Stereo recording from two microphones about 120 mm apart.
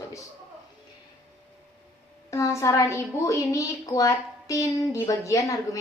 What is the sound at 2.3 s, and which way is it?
A woman's voice, 25° left (ahead or behind).